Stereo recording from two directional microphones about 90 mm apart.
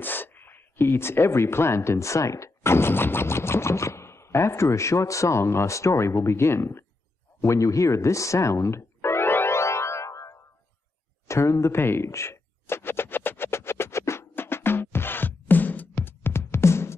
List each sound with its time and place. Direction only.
0.0 s speech: 20° left (ahead or behind)
7.4 s music: 35° left (ahead or behind)
11.2 s a sound: 35° left (ahead or behind)